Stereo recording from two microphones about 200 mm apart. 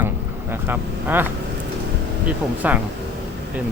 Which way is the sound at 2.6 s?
5° right (ahead or behind).